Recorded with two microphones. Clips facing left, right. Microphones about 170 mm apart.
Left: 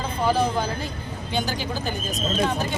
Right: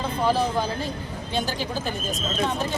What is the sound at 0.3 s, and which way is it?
Speech, centre (ahead or behind).